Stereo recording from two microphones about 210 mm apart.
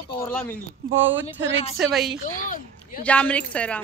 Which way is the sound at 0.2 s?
10° left (ahead or behind).